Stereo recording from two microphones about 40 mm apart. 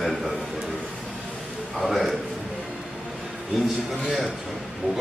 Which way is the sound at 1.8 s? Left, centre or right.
Centre.